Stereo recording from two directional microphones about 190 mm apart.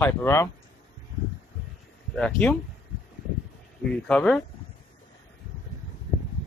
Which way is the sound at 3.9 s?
5° left (ahead or behind).